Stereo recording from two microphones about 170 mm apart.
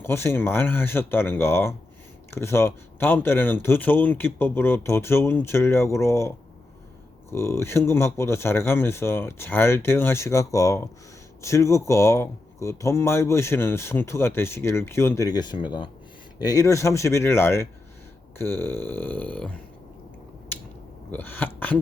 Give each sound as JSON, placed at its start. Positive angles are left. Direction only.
{"t": 0.0, "sound": "speech", "side_deg": 15}
{"t": 21.1, "sound": "speech", "side_deg": 10}